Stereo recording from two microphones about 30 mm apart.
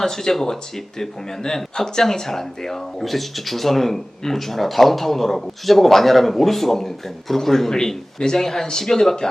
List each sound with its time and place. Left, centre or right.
0.0 s speech: centre